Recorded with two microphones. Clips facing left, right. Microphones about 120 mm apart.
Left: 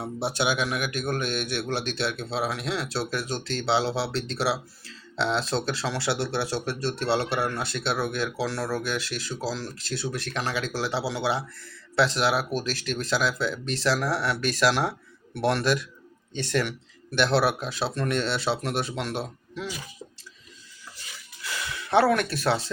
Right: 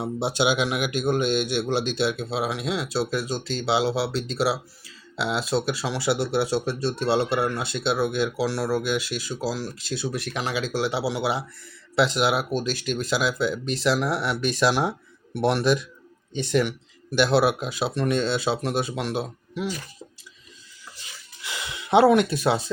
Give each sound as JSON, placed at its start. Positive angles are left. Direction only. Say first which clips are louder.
{"t": 0.0, "sound": "a man's voice", "louder": "right 3 dB", "side_deg": -20}
{"t": 21.4, "sound": "gasp", "louder": "left 1 dB", "side_deg": -20}